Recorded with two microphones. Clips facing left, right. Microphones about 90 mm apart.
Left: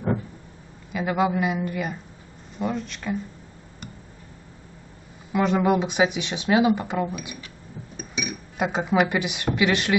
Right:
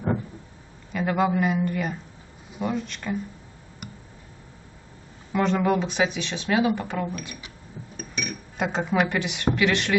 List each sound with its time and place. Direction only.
0.9 s a woman's voice: 5° left (ahead or behind)
5.3 s speech: 5° left (ahead or behind)